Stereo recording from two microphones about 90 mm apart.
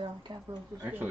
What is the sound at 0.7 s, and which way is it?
Speech, 35° right (ahead or behind).